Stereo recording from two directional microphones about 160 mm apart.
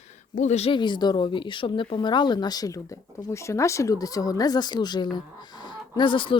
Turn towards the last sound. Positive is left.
turn(degrees=30)  # may be behind; listen again after turning